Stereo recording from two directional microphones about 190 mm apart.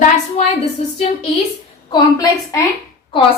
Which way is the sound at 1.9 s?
20° left (ahead or behind).